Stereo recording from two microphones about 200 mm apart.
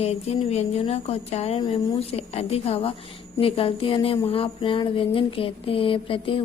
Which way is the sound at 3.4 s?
25° left (ahead or behind).